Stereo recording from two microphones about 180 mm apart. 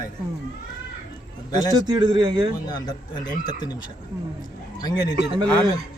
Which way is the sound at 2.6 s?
20° left (ahead or behind).